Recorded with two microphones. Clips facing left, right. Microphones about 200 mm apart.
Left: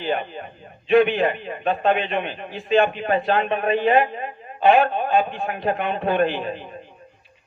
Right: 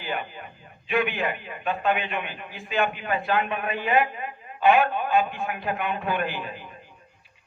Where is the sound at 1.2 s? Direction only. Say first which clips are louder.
Left 7 dB; 35° left (ahead or behind).